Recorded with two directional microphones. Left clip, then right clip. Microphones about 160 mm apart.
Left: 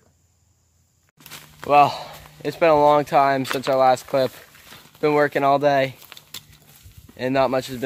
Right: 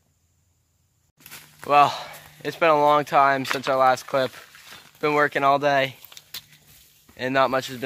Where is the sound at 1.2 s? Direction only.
45° right (ahead or behind).